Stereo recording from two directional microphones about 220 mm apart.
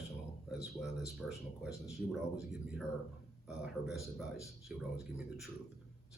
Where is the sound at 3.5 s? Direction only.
5° right (ahead or behind).